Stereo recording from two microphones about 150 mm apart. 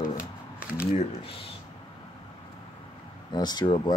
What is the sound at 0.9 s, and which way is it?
Speech, 40° left (ahead or behind).